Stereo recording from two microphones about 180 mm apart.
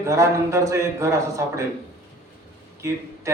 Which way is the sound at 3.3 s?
15° right (ahead or behind).